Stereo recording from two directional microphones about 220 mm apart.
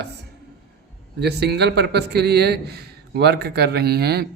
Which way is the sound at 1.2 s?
50° right (ahead or behind).